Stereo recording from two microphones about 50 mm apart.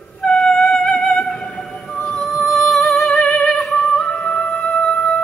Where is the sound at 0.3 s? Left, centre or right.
Centre.